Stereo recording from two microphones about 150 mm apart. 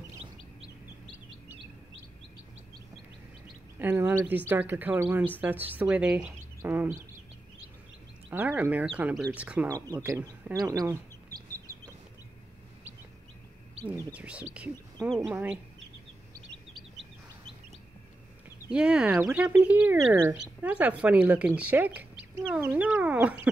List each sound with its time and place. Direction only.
3.8 s speech: 15° right (ahead or behind)
8.3 s speech: 10° right (ahead or behind)
9.7 s speech: 25° right (ahead or behind)
11.5 s bird: 25° right (ahead or behind)
14.1 s speech: 10° right (ahead or behind)
18.7 s speech: 5° right (ahead or behind)